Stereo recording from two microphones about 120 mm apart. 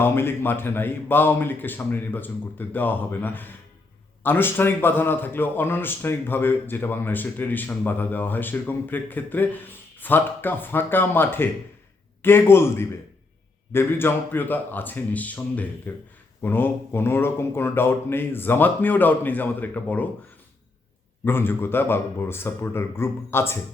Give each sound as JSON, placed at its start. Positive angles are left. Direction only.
{"t": 0.0, "sound": "a man's voice", "side_deg": 20}
{"t": 21.2, "sound": "speech", "side_deg": 20}